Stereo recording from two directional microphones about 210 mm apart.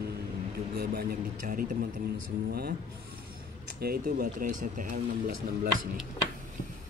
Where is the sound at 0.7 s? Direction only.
40° right (ahead or behind).